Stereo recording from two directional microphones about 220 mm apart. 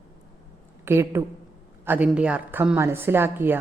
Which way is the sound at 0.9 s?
10° right (ahead or behind).